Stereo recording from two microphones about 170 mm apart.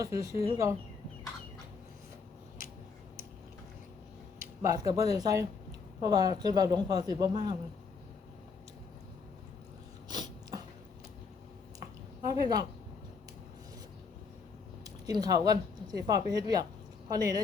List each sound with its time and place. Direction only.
0.0 s speech: 15° right (ahead or behind)
4.6 s speech: 20° right (ahead or behind)
10.1 s a sound: 25° right (ahead or behind)
12.3 s speech: 20° right (ahead or behind)
14.8 s speech: 20° right (ahead or behind)